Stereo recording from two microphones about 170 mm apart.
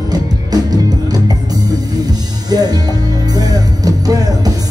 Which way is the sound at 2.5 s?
25° right (ahead or behind).